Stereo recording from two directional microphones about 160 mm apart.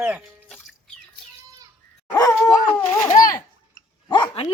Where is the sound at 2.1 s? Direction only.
20° left (ahead or behind).